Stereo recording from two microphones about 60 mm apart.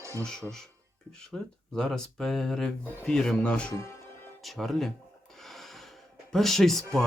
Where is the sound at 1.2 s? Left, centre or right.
Centre.